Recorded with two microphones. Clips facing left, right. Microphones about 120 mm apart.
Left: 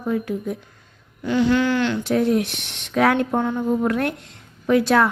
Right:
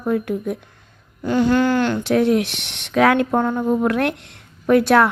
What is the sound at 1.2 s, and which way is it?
Speech, 45° right (ahead or behind).